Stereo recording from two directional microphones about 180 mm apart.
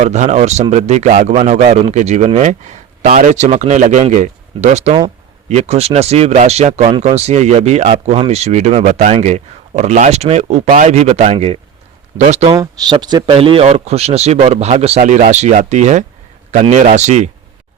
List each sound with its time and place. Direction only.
0.0 s a man's voice: 40° right (ahead or behind)
12.5 s a man's voice: 25° right (ahead or behind); by 17.3 s 40° right (ahead or behind)